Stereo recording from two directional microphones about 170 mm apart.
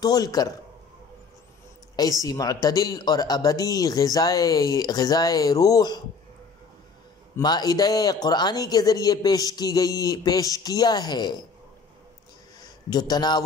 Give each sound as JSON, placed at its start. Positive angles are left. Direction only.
{"t": 0.0, "sound": "speech", "side_deg": 20}
{"t": 2.2, "sound": "speech", "side_deg": 20}
{"t": 7.3, "sound": "speech", "side_deg": 25}
{"t": 12.6, "sound": "a man's voice", "side_deg": 25}